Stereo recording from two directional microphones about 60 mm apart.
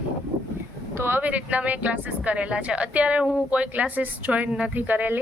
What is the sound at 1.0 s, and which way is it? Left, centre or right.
Speech, right.